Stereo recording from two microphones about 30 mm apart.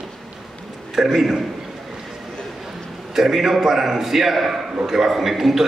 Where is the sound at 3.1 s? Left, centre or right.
Centre.